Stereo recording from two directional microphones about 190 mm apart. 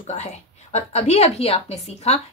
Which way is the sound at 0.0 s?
35° left (ahead or behind).